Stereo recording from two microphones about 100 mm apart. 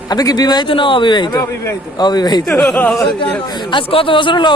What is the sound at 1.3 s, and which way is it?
Speech, 25° left (ahead or behind).